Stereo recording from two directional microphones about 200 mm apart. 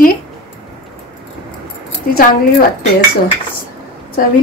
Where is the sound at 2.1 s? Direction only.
45° left (ahead or behind).